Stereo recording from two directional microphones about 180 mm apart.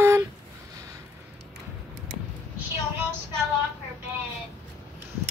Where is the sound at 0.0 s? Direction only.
15° right (ahead or behind).